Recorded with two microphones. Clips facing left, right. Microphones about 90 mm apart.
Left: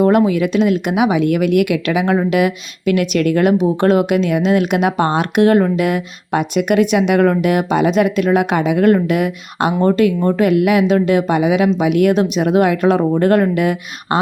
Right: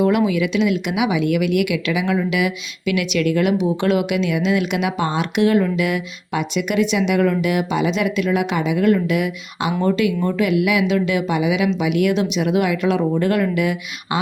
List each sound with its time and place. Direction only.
0.0 s a woman's voice: 45° left (ahead or behind)